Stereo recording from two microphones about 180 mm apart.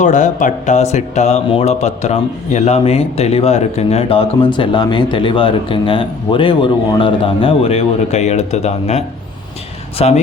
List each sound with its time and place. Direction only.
0.0 s speech: 45° left (ahead or behind)